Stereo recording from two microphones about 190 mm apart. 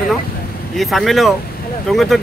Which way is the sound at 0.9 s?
Centre (ahead or behind).